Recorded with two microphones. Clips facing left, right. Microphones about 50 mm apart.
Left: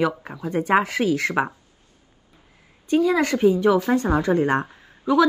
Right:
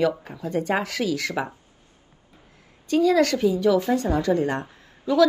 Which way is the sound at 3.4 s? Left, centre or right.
Left.